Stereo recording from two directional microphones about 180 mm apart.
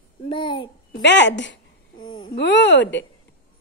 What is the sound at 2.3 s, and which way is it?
Speech, 75° left (ahead or behind).